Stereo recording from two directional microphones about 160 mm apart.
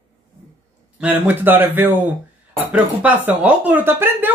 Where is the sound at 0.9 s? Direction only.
10° right (ahead or behind).